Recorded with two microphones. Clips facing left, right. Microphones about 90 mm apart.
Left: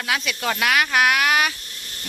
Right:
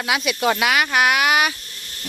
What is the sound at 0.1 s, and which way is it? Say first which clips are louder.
Speech: right 4 dB; 15° right (ahead or behind).